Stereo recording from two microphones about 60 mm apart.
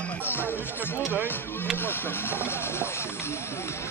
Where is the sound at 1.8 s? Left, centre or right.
Left.